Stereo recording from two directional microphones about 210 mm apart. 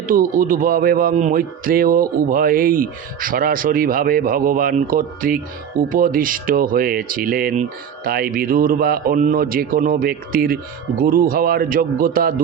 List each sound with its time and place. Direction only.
0.1 s speech: 40° right (ahead or behind)